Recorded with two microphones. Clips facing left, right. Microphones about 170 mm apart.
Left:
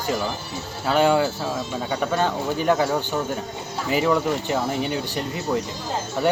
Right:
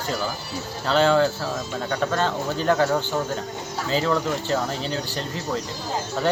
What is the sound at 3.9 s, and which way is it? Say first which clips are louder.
Speech: left 2 dB; 15° left (ahead or behind).